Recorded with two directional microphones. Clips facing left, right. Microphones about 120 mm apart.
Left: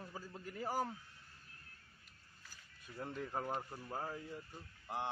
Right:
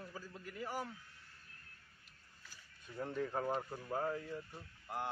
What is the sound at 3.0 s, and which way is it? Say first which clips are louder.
Speech: right 3 dB; 10° left (ahead or behind).